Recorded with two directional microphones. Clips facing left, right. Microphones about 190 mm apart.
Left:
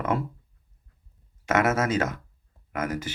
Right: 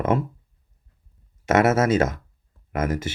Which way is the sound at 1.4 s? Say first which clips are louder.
Right 5 dB; 25° right (ahead or behind).